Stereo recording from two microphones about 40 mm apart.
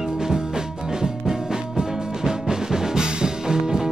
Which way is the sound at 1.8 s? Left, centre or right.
Centre.